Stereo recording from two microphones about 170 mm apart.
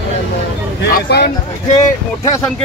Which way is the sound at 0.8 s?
65° left (ahead or behind).